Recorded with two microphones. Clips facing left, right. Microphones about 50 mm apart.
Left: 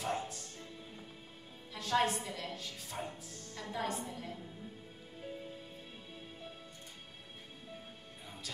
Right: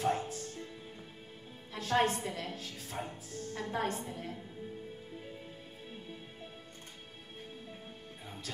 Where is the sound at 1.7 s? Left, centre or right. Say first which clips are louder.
Right 2 dB; right.